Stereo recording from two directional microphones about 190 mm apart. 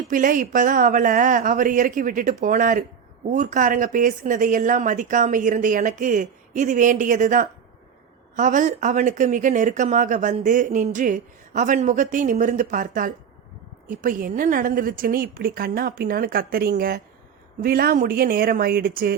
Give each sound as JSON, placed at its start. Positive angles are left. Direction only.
{"t": 0.1, "sound": "a woman's voice", "side_deg": -45}